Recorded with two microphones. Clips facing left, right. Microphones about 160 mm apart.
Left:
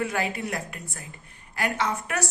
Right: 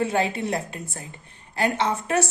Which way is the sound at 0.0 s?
25° right (ahead or behind).